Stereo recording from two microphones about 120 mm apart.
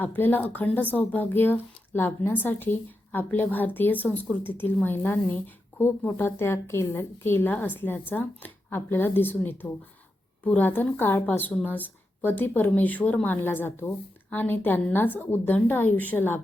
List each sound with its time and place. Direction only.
0.0 s speech: 15° left (ahead or behind)